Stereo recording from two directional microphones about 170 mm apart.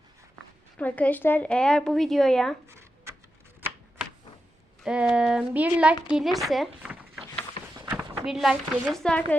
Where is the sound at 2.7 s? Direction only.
15° right (ahead or behind).